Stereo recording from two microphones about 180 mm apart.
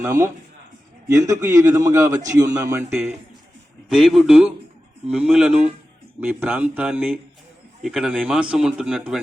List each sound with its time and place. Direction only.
0.0 s a man's voice: 15° right (ahead or behind)
3.8 s a man's voice: centre (ahead or behind)